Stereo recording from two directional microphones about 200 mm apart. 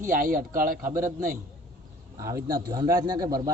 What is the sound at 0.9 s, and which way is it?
A man's voice, 15° right (ahead or behind).